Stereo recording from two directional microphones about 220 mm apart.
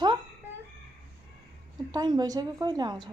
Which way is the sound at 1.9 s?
20° right (ahead or behind).